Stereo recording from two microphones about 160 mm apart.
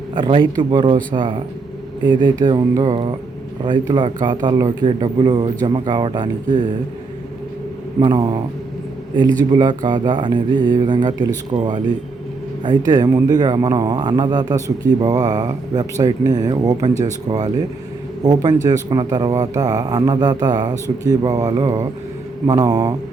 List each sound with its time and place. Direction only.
0.1 s speech: 30° right (ahead or behind)
8.0 s speech: 30° right (ahead or behind)
9.4 s speech: 25° right (ahead or behind)
18.2 s speech: 25° right (ahead or behind)